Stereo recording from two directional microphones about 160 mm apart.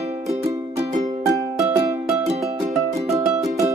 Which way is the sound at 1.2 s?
20° right (ahead or behind).